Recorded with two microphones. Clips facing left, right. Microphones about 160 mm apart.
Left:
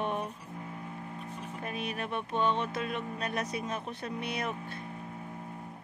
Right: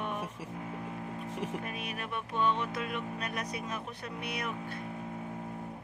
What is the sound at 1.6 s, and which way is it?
Speech, 30° left (ahead or behind).